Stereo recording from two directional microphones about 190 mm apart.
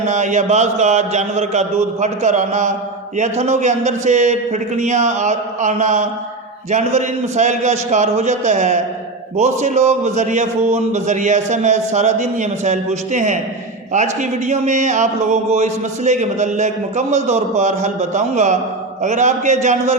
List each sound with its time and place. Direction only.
0.0 s a man's voice: 40° right (ahead or behind)